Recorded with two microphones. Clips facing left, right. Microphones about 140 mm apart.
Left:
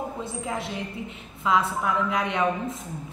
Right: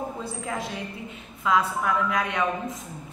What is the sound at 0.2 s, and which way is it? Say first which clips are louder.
A woman's voice: left 1 dB; 25° left (ahead or behind).